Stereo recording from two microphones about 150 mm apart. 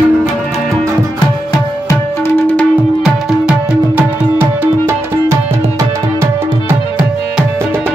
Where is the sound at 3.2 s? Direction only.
5° right (ahead or behind).